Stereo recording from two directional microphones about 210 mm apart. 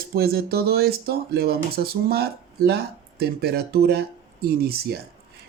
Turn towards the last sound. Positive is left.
turn(degrees=-50)  # may be behind; listen again after turning